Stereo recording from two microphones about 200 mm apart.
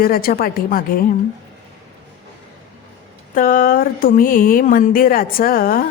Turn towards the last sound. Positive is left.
turn(degrees=45)  # may be behind; listen again after turning